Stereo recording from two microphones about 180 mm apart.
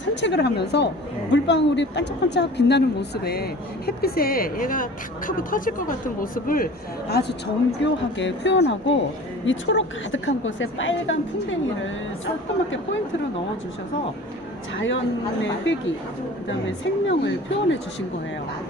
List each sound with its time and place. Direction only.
0.2 s speech: 75° left (ahead or behind); by 6.7 s 50° left (ahead or behind)
7.1 s speech: 65° left (ahead or behind)
7.9 s a woman's voice: 85° left
14.8 s a woman's voice: 90° left